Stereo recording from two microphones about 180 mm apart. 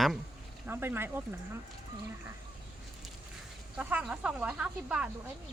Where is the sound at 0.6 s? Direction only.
10° right (ahead or behind).